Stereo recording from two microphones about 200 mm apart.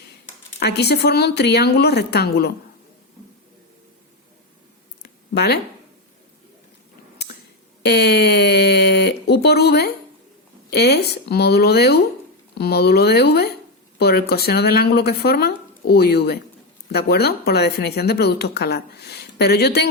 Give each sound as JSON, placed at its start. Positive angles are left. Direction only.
{"t": 0.6, "sound": "speech", "side_deg": 55}
{"t": 5.3, "sound": "speech", "side_deg": 55}
{"t": 7.8, "sound": "speech", "side_deg": 55}